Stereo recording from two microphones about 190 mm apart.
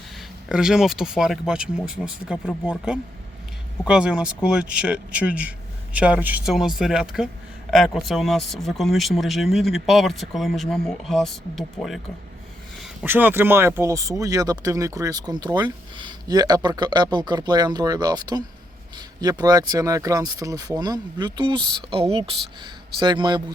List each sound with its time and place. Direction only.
0.4 s speech: 5° right (ahead or behind)
13.0 s speech: 10° right (ahead or behind)